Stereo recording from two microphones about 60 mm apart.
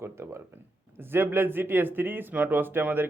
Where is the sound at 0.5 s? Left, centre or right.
Right.